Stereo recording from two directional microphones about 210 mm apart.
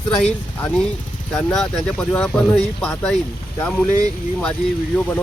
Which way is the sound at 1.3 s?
5° left (ahead or behind).